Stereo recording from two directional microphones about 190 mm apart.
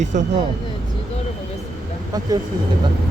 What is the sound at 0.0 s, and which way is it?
Speech, 40° right (ahead or behind).